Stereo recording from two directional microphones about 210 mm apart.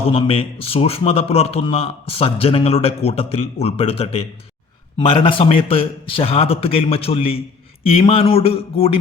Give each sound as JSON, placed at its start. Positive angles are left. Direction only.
{"t": 0.1, "sound": "a man's voice", "side_deg": 25}